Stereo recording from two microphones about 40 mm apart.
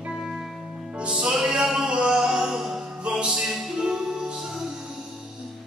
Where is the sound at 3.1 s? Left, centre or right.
Right.